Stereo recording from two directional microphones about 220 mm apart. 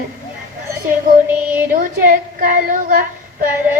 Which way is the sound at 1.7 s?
40° right (ahead or behind).